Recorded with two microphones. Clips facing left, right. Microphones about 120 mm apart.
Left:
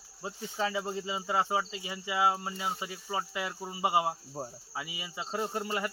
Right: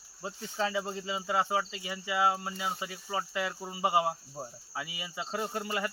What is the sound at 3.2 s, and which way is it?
Speech, 15° left (ahead or behind).